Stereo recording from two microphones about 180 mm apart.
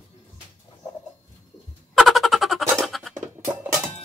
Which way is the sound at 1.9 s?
Centre (ahead or behind).